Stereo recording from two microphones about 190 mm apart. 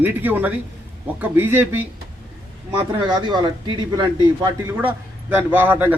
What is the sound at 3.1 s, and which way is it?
Speech, 20° right (ahead or behind).